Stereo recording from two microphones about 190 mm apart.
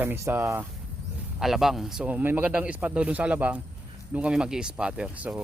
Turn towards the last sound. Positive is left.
turn(degrees=-5)  # may be behind; listen again after turning